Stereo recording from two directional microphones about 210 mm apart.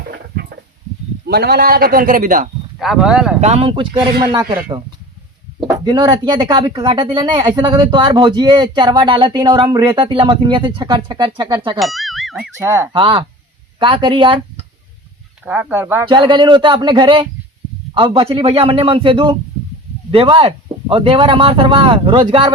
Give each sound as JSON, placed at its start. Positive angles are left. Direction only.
{"t": 0.1, "sound": "a sound", "side_deg": -50}
{"t": 1.3, "sound": "a man's voice", "side_deg": -50}
{"t": 2.7, "sound": "speech", "side_deg": 0}
{"t": 3.4, "sound": "speech", "side_deg": -30}
{"t": 5.6, "sound": "speech", "side_deg": -20}
{"t": 11.8, "sound": "music", "side_deg": 0}
{"t": 12.5, "sound": "speech", "side_deg": -15}
{"t": 12.9, "sound": "speech", "side_deg": -25}
{"t": 15.4, "sound": "speech", "side_deg": -10}
{"t": 16.0, "sound": "speech", "side_deg": -25}